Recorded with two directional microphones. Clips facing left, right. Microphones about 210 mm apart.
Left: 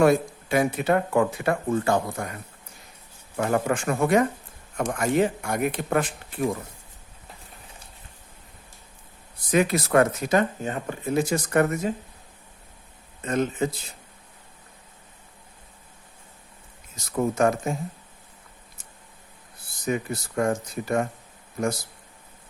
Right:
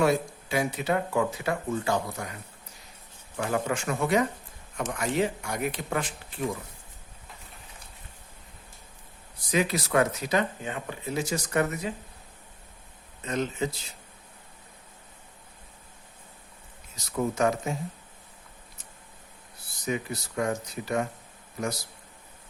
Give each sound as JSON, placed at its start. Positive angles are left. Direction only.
{"t": 0.0, "sound": "speech", "side_deg": 55}
{"t": 3.3, "sound": "speech", "side_deg": 50}
{"t": 9.5, "sound": "speech", "side_deg": 50}
{"t": 13.2, "sound": "speech", "side_deg": 50}
{"t": 17.1, "sound": "speech", "side_deg": 50}
{"t": 19.8, "sound": "speech", "side_deg": 50}